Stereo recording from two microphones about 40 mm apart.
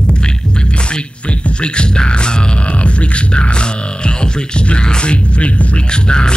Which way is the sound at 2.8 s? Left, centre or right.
Left.